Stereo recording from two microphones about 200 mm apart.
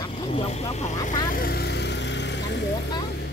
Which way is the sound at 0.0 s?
25° left (ahead or behind).